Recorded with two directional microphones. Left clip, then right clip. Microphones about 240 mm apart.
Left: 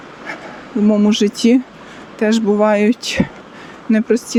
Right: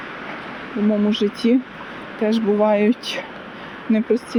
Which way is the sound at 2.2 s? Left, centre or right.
Left.